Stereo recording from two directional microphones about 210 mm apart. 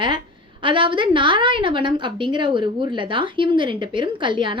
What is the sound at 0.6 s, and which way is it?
A woman's voice, 25° right (ahead or behind).